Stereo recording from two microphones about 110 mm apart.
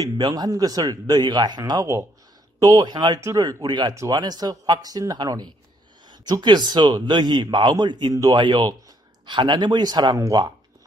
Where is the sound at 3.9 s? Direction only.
30° right (ahead or behind).